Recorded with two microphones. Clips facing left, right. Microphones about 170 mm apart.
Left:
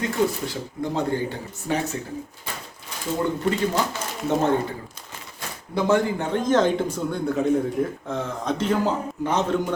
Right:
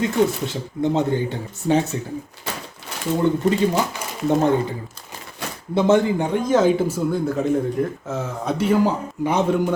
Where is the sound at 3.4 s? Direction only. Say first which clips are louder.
Right 4 dB; 20° right (ahead or behind).